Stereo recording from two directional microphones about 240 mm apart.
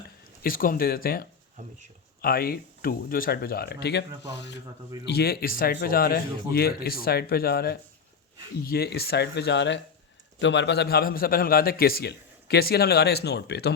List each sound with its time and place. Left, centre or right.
0.4 s a man's voice: left
1.6 s speech: right
2.2 s a man's voice: left